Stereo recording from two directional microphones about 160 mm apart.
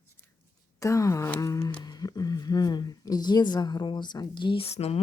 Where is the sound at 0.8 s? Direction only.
20° left (ahead or behind).